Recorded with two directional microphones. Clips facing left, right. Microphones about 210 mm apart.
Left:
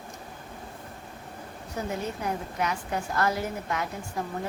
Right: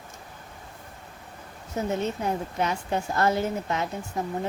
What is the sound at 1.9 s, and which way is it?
A woman's voice, 25° right (ahead or behind).